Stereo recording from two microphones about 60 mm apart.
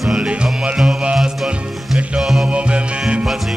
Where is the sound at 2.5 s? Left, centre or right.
Centre.